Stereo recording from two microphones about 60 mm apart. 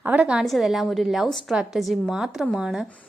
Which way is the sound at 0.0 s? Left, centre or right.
Right.